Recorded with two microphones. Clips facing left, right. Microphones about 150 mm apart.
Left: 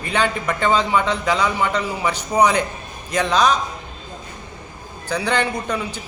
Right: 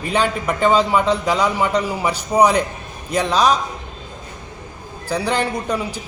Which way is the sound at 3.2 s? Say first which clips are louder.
Right 1 dB; 10° right (ahead or behind).